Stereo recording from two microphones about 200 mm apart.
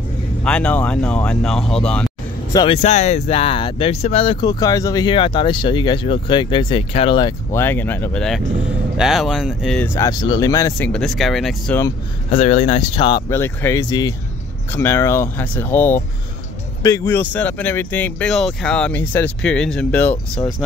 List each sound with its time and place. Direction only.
0.4 s speech: 5° left (ahead or behind)
2.5 s speech: 25° left (ahead or behind); by 9.8 s 5° right (ahead or behind)
9.8 s speech: 10° left (ahead or behind)
10.9 s speech: centre (ahead or behind)
12.3 s speech: 35° left (ahead or behind)
13.3 s speech: 10° left (ahead or behind)